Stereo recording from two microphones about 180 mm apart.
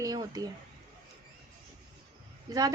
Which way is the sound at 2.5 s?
20° right (ahead or behind).